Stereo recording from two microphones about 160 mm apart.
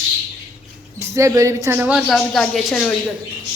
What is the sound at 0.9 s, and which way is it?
A woman's voice, 20° right (ahead or behind).